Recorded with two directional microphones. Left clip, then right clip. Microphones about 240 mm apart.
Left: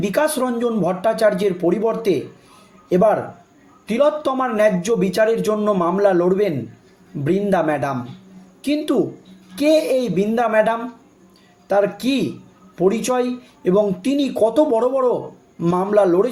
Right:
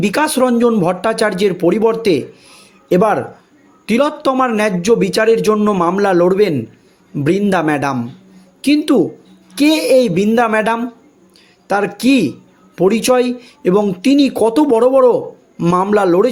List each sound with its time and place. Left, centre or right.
0.0 s speech: right